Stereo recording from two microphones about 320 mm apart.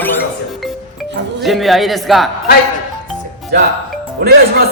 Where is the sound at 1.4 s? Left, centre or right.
Centre.